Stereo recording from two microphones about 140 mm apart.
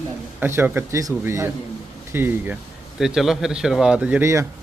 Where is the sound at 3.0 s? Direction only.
5° right (ahead or behind).